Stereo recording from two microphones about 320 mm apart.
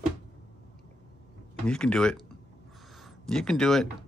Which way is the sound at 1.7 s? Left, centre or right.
Centre.